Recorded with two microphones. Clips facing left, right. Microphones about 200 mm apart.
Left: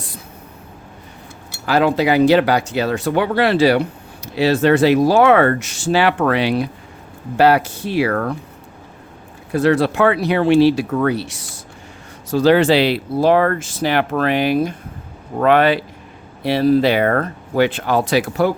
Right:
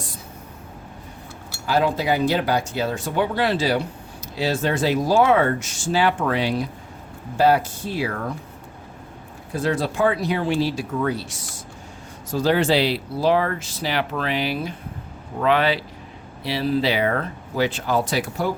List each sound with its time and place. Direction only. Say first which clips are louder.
1.6 s speech: left 5 dB; 75° left (ahead or behind)
9.5 s speech: left 8 dB; 70° left (ahead or behind)